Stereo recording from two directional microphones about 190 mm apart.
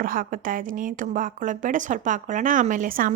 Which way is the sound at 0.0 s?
45° right (ahead or behind).